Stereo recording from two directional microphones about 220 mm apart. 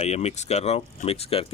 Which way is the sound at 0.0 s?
30° left (ahead or behind).